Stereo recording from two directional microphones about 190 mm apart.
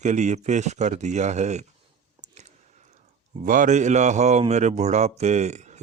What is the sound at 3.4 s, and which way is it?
Speech, 40° right (ahead or behind).